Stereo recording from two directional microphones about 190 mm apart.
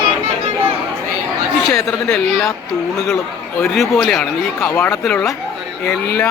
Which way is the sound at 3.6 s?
Centre (ahead or behind).